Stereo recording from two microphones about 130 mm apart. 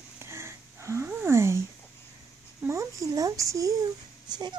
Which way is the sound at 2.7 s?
25° right (ahead or behind).